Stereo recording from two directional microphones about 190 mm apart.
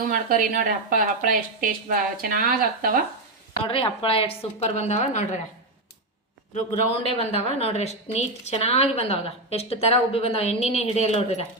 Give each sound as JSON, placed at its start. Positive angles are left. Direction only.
{"t": 0.1, "sound": "a woman's voice", "side_deg": -45}
{"t": 3.6, "sound": "a woman's voice", "side_deg": 30}
{"t": 6.5, "sound": "a woman's voice", "side_deg": 30}